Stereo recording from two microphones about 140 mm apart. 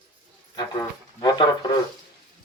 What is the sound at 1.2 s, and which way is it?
Speech, 30° left (ahead or behind).